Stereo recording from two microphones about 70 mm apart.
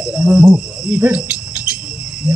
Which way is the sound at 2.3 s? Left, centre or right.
Centre.